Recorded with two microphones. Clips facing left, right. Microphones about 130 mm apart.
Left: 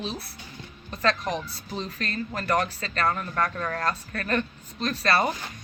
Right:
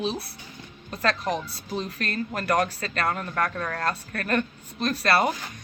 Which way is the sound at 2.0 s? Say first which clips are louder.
Right 1 dB; 45° right (ahead or behind).